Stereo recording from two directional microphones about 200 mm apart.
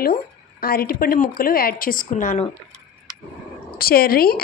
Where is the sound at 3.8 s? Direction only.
50° left (ahead or behind).